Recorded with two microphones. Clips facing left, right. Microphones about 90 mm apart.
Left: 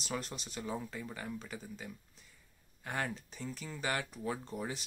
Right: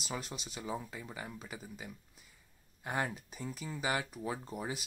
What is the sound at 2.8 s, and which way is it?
Speech, 20° right (ahead or behind).